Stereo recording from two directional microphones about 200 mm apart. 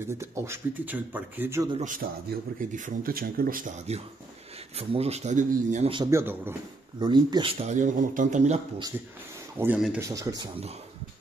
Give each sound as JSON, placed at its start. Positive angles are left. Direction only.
{"t": 0.0, "sound": "speech", "side_deg": -15}
{"t": 1.7, "sound": "speech", "side_deg": -40}
{"t": 4.7, "sound": "speech", "side_deg": -30}
{"t": 5.9, "sound": "speech", "side_deg": -20}
{"t": 7.6, "sound": "speech", "side_deg": -35}
{"t": 9.6, "sound": "speech", "side_deg": -5}
{"t": 9.9, "sound": "speech", "side_deg": -15}